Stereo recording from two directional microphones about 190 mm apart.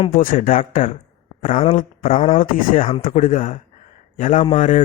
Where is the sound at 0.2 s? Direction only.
45° left (ahead or behind).